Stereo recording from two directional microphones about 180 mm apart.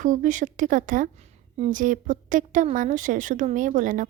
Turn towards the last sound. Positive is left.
turn(degrees=-45)  # may be behind; listen again after turning